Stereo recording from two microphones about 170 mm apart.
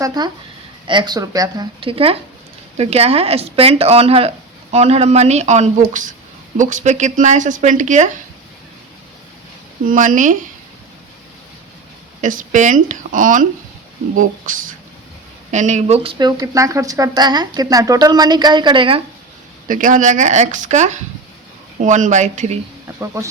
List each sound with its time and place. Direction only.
0.0 s a woman's voice: 25° right (ahead or behind); by 8.1 s 45° right (ahead or behind)
9.8 s a woman's voice: 50° right (ahead or behind)
12.2 s a woman's voice: 50° right (ahead or behind)
16.1 s a woman's voice: 20° right (ahead or behind)
19.6 s a woman's voice: 50° right (ahead or behind)
23.0 s speech: 15° right (ahead or behind)